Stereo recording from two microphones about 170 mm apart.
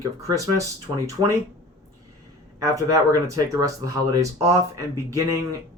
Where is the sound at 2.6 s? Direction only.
20° right (ahead or behind).